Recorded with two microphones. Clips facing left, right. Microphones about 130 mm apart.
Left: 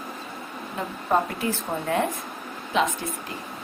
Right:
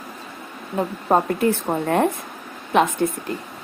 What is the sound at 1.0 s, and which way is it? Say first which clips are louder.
A woman's voice: right 5 dB; 50° right (ahead or behind).